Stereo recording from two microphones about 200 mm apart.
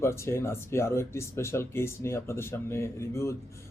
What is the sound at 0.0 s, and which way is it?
Speech, 15° left (ahead or behind).